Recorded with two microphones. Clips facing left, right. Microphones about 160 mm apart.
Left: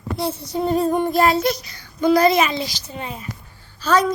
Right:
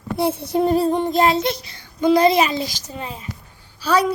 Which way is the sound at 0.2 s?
55° right (ahead or behind).